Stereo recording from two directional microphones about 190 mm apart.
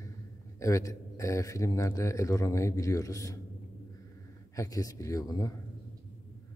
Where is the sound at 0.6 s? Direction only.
15° left (ahead or behind).